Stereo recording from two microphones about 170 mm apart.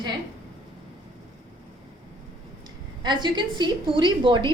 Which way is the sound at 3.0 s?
25° right (ahead or behind).